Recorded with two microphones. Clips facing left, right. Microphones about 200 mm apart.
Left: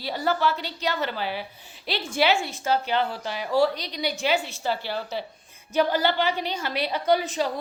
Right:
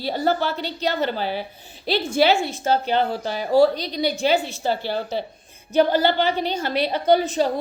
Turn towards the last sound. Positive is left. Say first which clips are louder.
# right 5 dB
turn(degrees=-25)  # may be behind; listen again after turning